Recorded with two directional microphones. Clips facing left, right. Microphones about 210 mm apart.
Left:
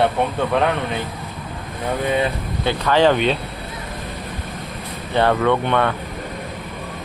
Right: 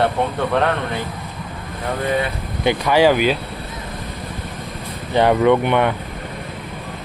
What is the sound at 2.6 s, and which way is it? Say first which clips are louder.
Speech: right 2 dB; 15° right (ahead or behind).